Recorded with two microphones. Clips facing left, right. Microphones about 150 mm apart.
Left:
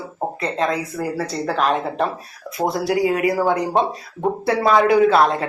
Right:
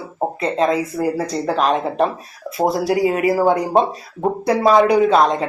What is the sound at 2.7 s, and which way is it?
Speech, 25° right (ahead or behind).